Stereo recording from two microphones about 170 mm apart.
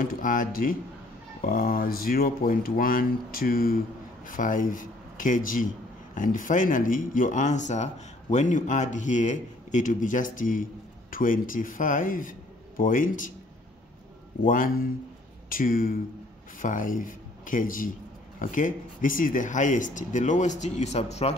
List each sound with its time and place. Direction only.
0.0 s speech: 55° left (ahead or behind)
14.4 s speech: 50° left (ahead or behind)